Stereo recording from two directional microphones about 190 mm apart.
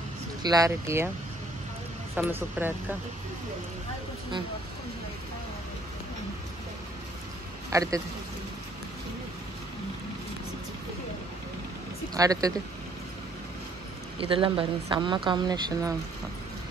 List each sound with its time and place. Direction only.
0.4 s speech: 20° right (ahead or behind)
2.1 s speech: 10° right (ahead or behind)
7.7 s speech: 15° right (ahead or behind)
12.1 s speech: 20° right (ahead or behind)
14.2 s speech: 30° right (ahead or behind)